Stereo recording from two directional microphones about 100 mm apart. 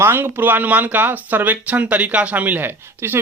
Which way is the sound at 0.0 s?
20° right (ahead or behind).